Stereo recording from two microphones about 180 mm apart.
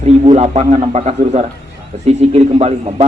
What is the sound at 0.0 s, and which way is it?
A man's voice, 35° right (ahead or behind).